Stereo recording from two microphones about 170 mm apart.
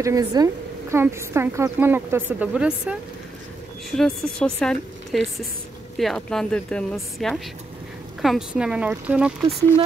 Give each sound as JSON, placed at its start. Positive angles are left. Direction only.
{"t": 0.0, "sound": "a woman's voice", "side_deg": -20}